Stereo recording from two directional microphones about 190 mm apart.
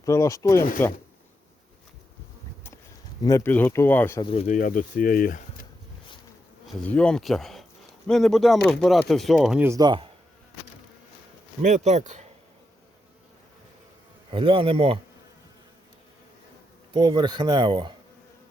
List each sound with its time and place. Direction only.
0.0 s speech: 15° left (ahead or behind)
3.2 s speech: 15° left (ahead or behind)
4.2 s speech: 30° left (ahead or behind)
4.4 s speech: 45° left (ahead or behind)
6.7 s speech: 5° left (ahead or behind); by 10.1 s 25° right (ahead or behind)
11.6 s speech: 40° right (ahead or behind)
14.3 s speech: 30° right (ahead or behind)
16.9 s speech: 25° right (ahead or behind)